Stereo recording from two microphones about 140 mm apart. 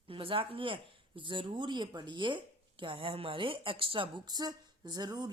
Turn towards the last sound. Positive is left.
turn(degrees=-30)  # may be behind; listen again after turning